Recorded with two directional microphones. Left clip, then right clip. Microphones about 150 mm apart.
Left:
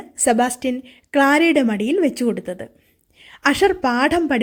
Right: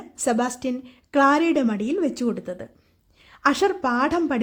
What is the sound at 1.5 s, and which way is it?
Speech, 15° left (ahead or behind).